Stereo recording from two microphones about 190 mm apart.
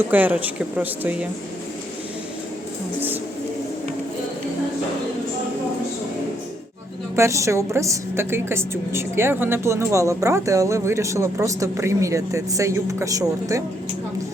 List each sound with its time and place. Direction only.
0.1 s a woman's voice: 10° right (ahead or behind)
7.2 s a woman's voice: 15° right (ahead or behind)